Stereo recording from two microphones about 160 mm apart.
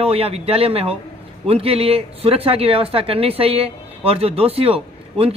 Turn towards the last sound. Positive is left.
turn(degrees=-35)  # may be behind; listen again after turning